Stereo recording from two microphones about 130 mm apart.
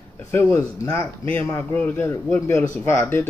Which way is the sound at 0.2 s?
15° left (ahead or behind).